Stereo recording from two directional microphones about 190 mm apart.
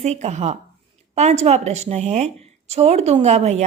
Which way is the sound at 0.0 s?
35° right (ahead or behind).